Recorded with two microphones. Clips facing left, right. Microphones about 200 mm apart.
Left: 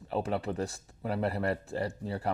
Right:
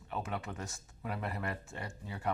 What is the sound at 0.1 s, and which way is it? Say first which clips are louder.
Speech: left 8 dB; 30° left (ahead or behind).